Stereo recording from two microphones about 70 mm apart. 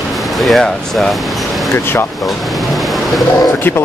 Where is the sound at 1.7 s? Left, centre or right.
Left.